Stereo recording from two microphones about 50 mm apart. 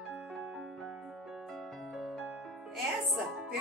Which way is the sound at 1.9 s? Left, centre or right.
Centre.